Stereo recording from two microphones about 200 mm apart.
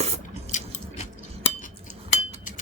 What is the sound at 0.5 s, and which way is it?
Biting, 40° left (ahead or behind).